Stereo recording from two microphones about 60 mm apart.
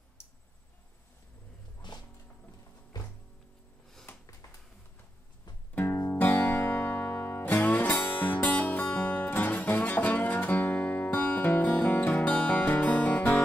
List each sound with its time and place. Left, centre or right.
4.1 s a sound: left
5.8 s music: left
11.1 s music: left